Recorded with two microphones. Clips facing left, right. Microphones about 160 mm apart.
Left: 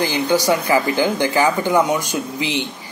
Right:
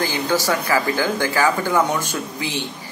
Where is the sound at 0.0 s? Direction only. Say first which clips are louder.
Left 3 dB; 15° left (ahead or behind).